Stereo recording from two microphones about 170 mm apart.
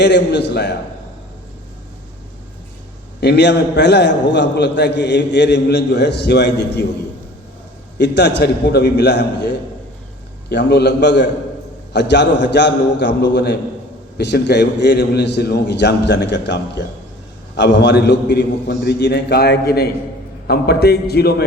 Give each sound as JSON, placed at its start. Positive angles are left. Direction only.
{"t": 0.0, "sound": "a man's voice", "side_deg": 90}
{"t": 3.2, "sound": "a man's voice", "side_deg": 85}
{"t": 7.9, "sound": "a man's voice", "side_deg": 85}